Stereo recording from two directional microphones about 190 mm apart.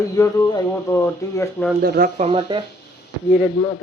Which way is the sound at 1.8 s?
50° right (ahead or behind).